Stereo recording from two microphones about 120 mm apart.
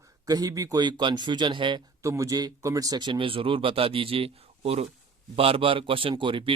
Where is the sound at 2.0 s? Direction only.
25° right (ahead or behind).